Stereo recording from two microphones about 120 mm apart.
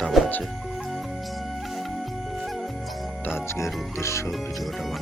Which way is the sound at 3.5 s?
25° left (ahead or behind).